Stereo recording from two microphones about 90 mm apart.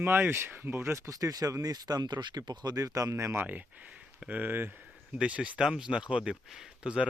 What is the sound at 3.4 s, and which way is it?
Speech, 15° right (ahead or behind).